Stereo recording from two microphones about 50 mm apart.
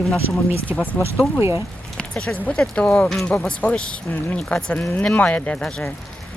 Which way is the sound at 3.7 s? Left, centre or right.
Centre.